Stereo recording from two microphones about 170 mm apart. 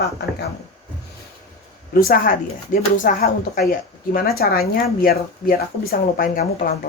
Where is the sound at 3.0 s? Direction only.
50° left (ahead or behind).